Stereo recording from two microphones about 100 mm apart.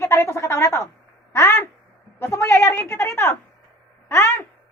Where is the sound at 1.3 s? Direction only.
25° left (ahead or behind).